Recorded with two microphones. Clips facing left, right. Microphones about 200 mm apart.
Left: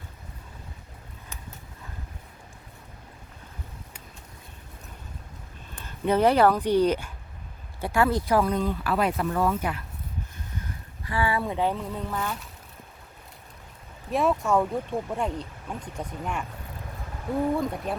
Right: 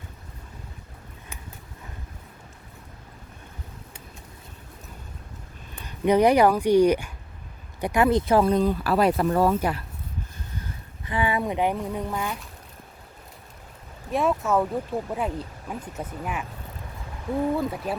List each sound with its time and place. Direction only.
5.8 s speech: 15° right (ahead or behind); by 9.8 s 35° right (ahead or behind)
11.0 s speech: 20° right (ahead or behind)
14.1 s speech: centre (ahead or behind)
17.6 s speech: centre (ahead or behind)